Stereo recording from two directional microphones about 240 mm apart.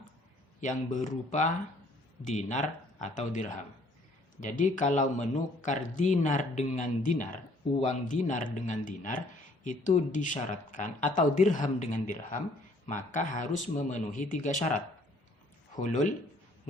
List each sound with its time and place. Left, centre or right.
0.6 s speech: left
15.8 s speech: left